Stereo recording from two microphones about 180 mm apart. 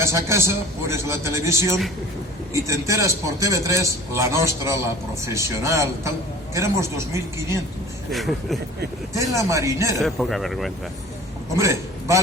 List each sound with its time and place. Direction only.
0.0 s a man's voice: 15° right (ahead or behind)
8.1 s speech: centre (ahead or behind)
9.1 s a man's voice: 15° right (ahead or behind)
10.0 s speech: centre (ahead or behind)
11.5 s a man's voice: 15° right (ahead or behind)